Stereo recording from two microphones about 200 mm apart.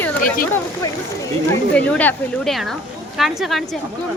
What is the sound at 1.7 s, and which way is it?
Speech, 5° left (ahead or behind).